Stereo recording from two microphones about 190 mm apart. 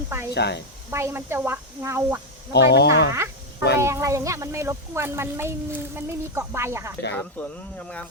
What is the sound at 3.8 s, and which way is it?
Speech, 15° right (ahead or behind).